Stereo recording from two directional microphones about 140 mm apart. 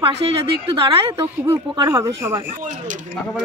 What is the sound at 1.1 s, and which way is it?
Speech, 15° right (ahead or behind).